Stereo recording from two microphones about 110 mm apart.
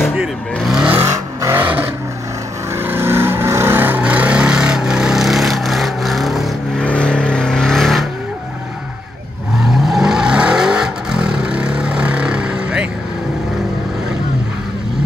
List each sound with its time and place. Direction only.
0.7 s vehicle: 15° right (ahead or behind)
1.0 s vehicle: 25° right (ahead or behind); by 6.5 s centre (ahead or behind)
6.8 s vehicle: 10° left (ahead or behind)
9.7 s vehicle: centre (ahead or behind)